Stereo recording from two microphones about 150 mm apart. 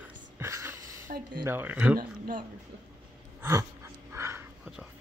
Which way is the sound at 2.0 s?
65° right (ahead or behind).